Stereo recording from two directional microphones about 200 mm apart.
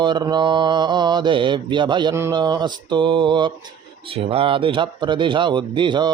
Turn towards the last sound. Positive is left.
turn(degrees=-25)  # may be behind; listen again after turning